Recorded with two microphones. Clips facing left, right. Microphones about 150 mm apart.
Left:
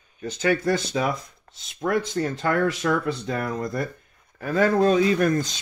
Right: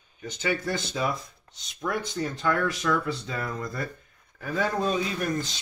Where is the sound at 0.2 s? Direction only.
80° left.